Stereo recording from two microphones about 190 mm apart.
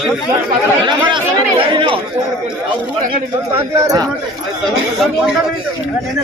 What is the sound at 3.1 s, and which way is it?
Speech, 25° right (ahead or behind).